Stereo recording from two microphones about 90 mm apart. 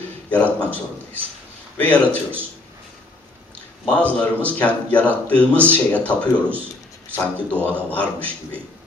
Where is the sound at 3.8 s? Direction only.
15° left (ahead or behind).